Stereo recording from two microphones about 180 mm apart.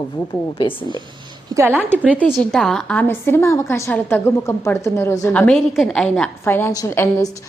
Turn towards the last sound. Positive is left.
turn(degrees=15)  # may be behind; listen again after turning